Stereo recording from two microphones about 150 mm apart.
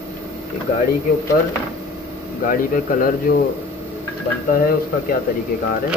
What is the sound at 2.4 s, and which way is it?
Speech, 65° left (ahead or behind).